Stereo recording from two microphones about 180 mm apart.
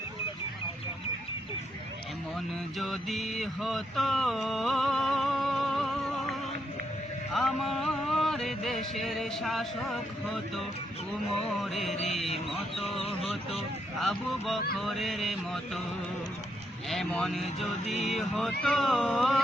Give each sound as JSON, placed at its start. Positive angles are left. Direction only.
{"t": 2.7, "sound": "a sound", "side_deg": 0}
{"t": 7.3, "sound": "music", "side_deg": 0}
{"t": 12.8, "sound": "speech", "side_deg": 30}
{"t": 14.0, "sound": "music", "side_deg": 0}
{"t": 16.9, "sound": "music", "side_deg": 0}